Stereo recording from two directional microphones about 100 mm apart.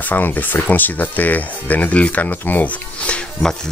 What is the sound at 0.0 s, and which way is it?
Speech, 20° left (ahead or behind).